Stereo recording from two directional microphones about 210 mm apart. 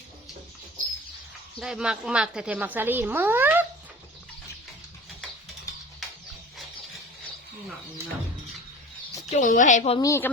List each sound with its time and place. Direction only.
1.5 s a woman's voice: centre (ahead or behind)
9.3 s a woman's voice: 40° left (ahead or behind)
10.0 s speech: 10° left (ahead or behind)